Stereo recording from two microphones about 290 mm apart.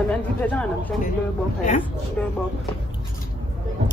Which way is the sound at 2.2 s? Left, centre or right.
Centre.